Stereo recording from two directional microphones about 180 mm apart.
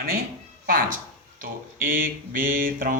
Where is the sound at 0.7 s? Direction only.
50° right (ahead or behind).